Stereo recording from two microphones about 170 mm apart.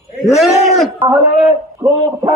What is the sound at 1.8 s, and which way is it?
Speech, 20° right (ahead or behind).